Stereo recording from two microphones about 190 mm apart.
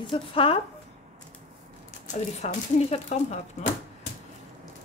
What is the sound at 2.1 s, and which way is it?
Speech, 40° left (ahead or behind).